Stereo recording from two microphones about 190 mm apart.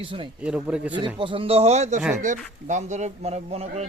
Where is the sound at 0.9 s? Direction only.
25° right (ahead or behind).